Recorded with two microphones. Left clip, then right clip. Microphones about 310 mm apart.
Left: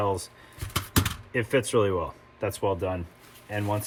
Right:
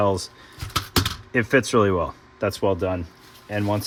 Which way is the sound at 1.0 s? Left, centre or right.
Right.